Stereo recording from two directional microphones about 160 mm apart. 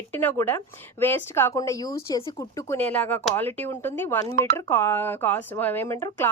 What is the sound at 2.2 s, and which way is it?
Speech, 35° left (ahead or behind).